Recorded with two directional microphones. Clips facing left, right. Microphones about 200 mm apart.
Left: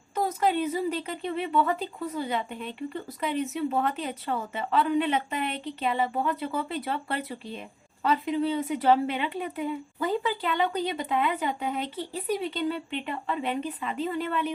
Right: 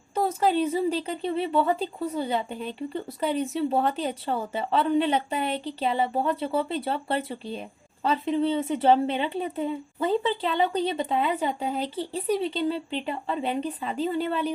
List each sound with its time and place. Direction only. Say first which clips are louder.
0.1 s speech: right 2 dB; 30° right (ahead or behind)